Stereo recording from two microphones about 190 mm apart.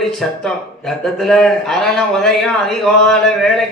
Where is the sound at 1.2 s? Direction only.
5° left (ahead or behind).